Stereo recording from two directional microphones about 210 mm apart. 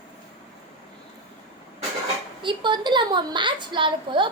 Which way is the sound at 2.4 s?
20° right (ahead or behind).